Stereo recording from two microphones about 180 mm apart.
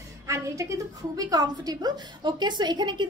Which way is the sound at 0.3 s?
15° right (ahead or behind).